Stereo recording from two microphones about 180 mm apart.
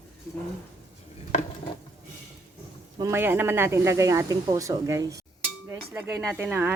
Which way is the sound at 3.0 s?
15° right (ahead or behind).